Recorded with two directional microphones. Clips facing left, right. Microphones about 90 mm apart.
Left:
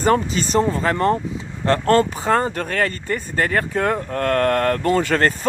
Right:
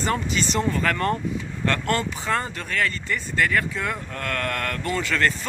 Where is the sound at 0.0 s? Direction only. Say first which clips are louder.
Left 6 dB; 40° left (ahead or behind).